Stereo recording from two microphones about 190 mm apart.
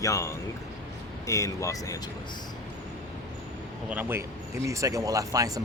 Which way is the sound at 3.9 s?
10° right (ahead or behind).